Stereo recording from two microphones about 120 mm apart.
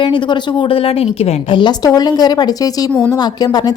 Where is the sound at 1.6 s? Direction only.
35° left (ahead or behind).